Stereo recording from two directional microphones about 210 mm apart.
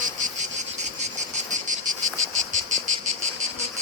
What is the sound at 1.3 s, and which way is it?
Cricket, 35° right (ahead or behind).